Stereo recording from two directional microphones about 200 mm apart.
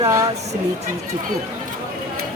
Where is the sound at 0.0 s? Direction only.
15° right (ahead or behind).